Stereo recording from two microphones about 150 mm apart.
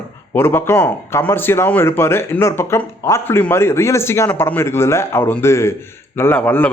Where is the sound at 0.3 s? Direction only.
15° left (ahead or behind).